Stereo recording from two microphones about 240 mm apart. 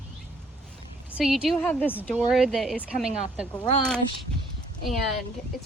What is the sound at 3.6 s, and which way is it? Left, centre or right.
Speech, left.